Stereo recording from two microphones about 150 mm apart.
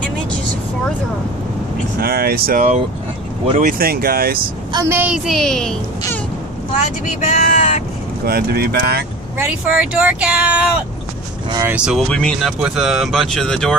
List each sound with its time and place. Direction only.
2.0 s speech: 90° right
3.5 s speech: 70° right (ahead or behind)
4.7 s speech: 15° right (ahead or behind); by 5.8 s 5° left (ahead or behind)
7.2 s speech: 45° left (ahead or behind)
8.3 s speech: 90° right
9.4 s speech: 10° right (ahead or behind)
12.1 s speech: 5° left (ahead or behind)